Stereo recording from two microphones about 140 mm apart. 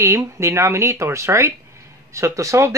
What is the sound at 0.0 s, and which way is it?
Speech, 20° right (ahead or behind).